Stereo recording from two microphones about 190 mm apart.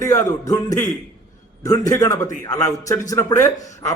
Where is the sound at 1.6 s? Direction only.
20° left (ahead or behind).